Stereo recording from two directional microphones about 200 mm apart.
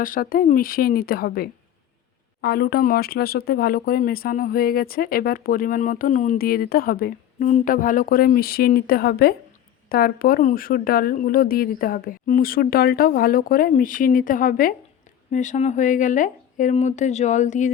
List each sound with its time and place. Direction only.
0.0 s speech: 45° left (ahead or behind)